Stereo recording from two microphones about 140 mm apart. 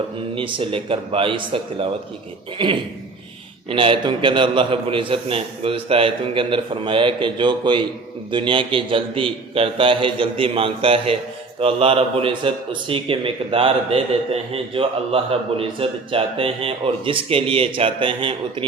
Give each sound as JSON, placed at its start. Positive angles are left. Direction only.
{"t": 0.3, "sound": "a man's voice", "side_deg": -40}